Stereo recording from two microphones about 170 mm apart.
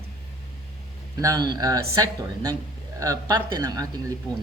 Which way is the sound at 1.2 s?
20° right (ahead or behind).